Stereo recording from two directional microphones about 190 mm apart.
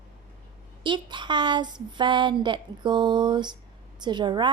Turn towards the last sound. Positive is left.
turn(degrees=-25)  # may be behind; listen again after turning